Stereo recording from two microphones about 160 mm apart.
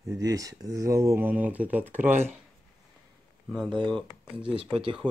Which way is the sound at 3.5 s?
Centre (ahead or behind).